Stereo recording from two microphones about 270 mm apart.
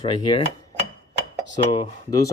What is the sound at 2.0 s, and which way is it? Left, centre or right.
Speech, centre.